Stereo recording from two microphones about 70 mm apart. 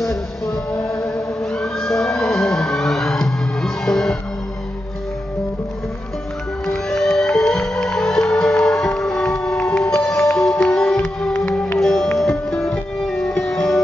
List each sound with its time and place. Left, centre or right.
0.0 s music: centre
1.6 s emergency vehicle: centre
6.7 s music: centre
11.3 s music: left
11.8 s music: centre